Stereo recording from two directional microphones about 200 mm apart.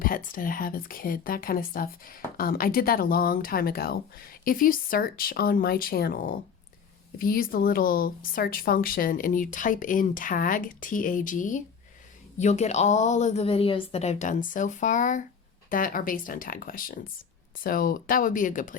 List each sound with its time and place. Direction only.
0.0 s a woman's voice: 45° left (ahead or behind)